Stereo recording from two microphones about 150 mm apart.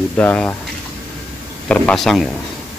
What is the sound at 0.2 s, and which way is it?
Speech, 10° left (ahead or behind).